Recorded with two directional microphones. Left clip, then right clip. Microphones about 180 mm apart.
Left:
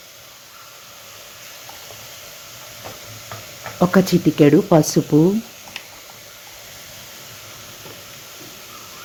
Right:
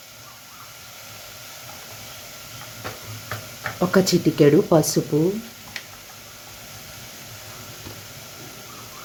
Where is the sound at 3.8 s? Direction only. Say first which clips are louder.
Left 2 dB; 20° left (ahead or behind).